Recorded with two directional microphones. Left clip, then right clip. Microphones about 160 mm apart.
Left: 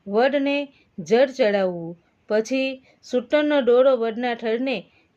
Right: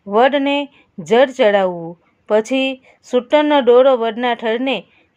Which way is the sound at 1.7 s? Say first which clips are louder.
Right 5 dB; 30° right (ahead or behind).